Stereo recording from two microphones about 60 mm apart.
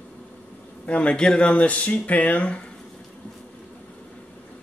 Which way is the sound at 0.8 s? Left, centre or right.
Left.